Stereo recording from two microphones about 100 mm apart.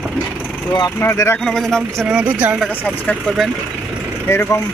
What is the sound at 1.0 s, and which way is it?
Speech, 25° left (ahead or behind).